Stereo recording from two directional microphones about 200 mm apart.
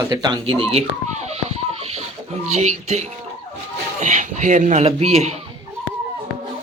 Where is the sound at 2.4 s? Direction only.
35° right (ahead or behind).